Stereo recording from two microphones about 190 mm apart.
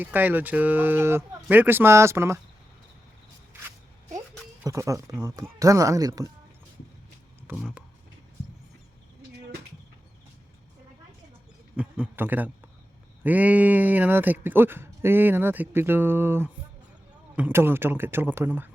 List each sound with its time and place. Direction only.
0.0 s speech: 10° right (ahead or behind)
4.6 s speech: 15° right (ahead or behind)
7.5 s a sound: centre (ahead or behind)
11.8 s speech: 10° right (ahead or behind)